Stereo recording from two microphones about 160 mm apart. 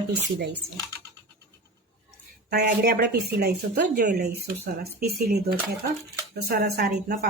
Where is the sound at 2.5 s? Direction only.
90° right.